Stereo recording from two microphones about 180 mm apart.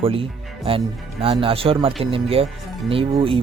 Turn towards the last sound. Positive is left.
turn(degrees=-30)  # may be behind; listen again after turning